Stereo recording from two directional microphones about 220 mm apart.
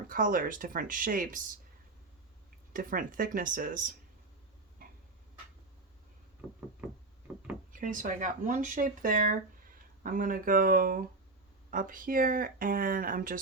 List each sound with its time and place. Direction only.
0.1 s speech: 40° right (ahead or behind)
2.7 s speech: 40° right (ahead or behind)
4.8 s tick-tock: 40° right (ahead or behind)
7.7 s speech: 35° right (ahead or behind)